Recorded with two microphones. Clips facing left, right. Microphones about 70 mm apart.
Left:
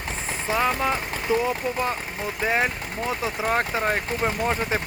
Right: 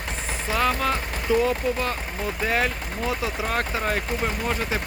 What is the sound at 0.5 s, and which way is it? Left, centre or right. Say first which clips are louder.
Speech: even; centre.